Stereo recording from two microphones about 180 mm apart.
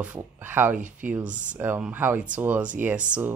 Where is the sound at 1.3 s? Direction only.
45° right (ahead or behind).